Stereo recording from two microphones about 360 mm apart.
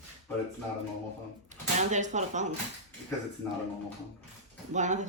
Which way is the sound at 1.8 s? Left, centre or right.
Centre.